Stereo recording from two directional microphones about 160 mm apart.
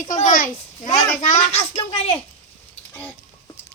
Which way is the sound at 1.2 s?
50° left (ahead or behind).